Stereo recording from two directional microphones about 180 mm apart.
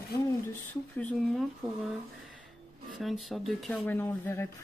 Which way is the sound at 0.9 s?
5° left (ahead or behind).